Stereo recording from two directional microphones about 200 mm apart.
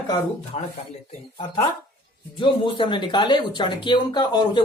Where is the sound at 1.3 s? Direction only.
25° left (ahead or behind).